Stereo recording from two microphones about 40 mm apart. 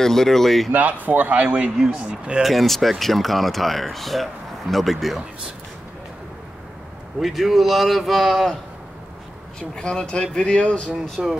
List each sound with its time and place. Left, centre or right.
0.0 s speech: centre
0.7 s a man's voice: right
2.4 s speech: centre
7.2 s speech: centre
9.6 s speech: left
11.2 s speech: centre